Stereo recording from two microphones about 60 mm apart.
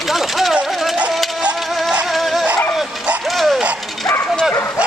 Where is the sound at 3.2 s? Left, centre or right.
Centre.